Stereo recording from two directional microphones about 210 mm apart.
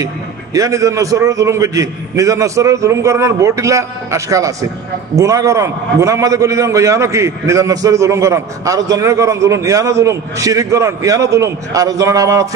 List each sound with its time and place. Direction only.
0.0 s a man's voice: 15° right (ahead or behind)